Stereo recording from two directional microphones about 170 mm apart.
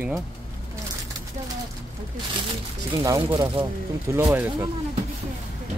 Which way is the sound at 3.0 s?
20° right (ahead or behind).